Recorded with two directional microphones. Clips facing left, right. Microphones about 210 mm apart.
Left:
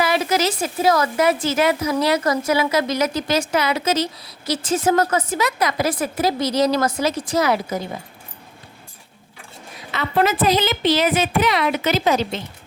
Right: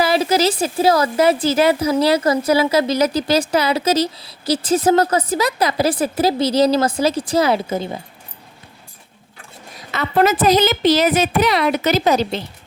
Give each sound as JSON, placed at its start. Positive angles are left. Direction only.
{"t": 0.0, "sound": "a woman's voice", "side_deg": -30}
{"t": 9.7, "sound": "a sound", "side_deg": -45}
{"t": 10.4, "sound": "a woman's voice", "side_deg": -40}